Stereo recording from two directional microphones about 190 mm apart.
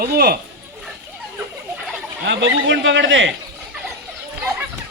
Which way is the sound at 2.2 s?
75° right (ahead or behind).